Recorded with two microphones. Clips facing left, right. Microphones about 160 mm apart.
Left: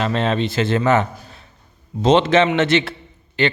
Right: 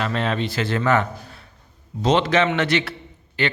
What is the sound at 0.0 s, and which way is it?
A man's voice, 25° left (ahead or behind).